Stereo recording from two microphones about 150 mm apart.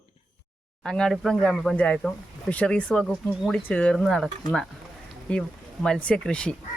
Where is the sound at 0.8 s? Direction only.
5° left (ahead or behind).